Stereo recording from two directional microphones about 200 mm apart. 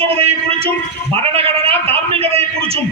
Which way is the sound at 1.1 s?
30° right (ahead or behind).